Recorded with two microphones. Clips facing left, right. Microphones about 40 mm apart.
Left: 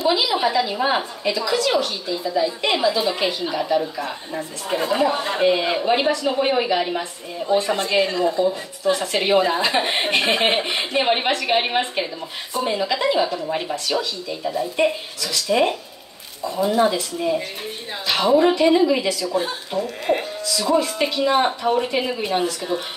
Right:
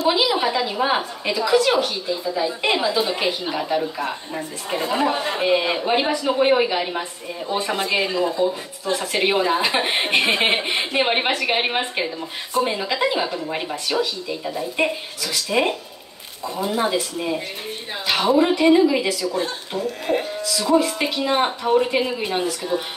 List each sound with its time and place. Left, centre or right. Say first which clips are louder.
0.1 s a woman's voice: even; centre
3.0 s a woman's voice: even; centre
3.3 s a woman's voice: left 1 dB; centre
4.8 s a woman's voice: left 1 dB; centre
19.8 s speech: left 1 dB; centre
20.5 s speech: right 1 dB; centre